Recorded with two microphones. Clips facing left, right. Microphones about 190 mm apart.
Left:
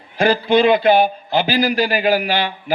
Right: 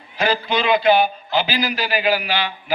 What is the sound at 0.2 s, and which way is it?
A man's voice, 50° left (ahead or behind).